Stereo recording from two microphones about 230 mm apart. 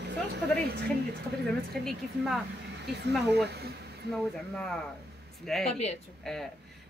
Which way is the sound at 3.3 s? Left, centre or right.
Right.